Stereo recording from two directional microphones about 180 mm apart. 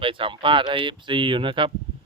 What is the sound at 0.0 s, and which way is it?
Speech, 30° right (ahead or behind).